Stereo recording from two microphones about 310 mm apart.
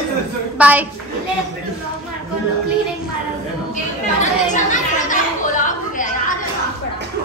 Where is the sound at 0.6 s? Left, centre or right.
Centre.